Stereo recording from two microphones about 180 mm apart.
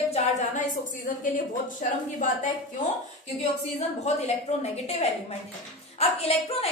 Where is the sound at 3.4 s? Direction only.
35° left (ahead or behind).